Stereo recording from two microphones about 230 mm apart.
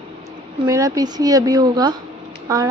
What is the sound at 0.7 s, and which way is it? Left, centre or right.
Speech, centre.